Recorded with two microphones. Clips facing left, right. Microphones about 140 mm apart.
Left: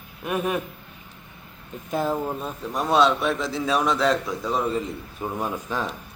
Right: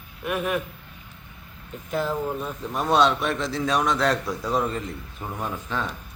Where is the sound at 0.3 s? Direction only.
25° left (ahead or behind).